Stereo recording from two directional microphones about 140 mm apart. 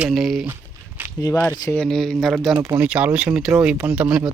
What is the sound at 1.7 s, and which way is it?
Speech, 5° left (ahead or behind).